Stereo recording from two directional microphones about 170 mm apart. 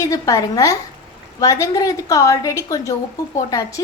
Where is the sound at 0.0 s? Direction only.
20° left (ahead or behind).